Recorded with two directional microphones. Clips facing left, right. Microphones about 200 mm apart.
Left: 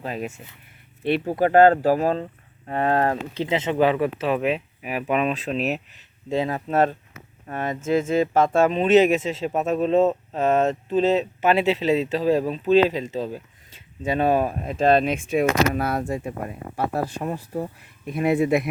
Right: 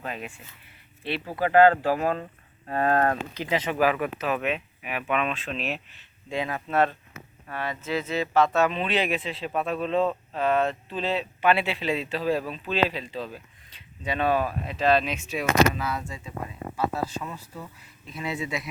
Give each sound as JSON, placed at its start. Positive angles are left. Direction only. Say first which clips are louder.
{"t": 0.0, "sound": "speech", "louder": "left 6 dB", "side_deg": 35}
{"t": 2.6, "sound": "speech", "louder": "left 2 dB", "side_deg": 20}
{"t": 13.1, "sound": "speech", "louder": "left 6 dB", "side_deg": 15}
{"t": 13.7, "sound": "speech", "louder": "left 6 dB", "side_deg": 45}